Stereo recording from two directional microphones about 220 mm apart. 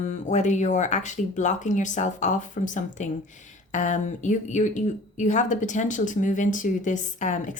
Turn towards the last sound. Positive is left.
turn(degrees=35)  # may be behind; listen again after turning